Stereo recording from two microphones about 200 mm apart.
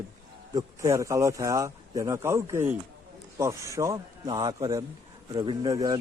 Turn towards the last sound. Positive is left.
turn(degrees=-20)  # may be behind; listen again after turning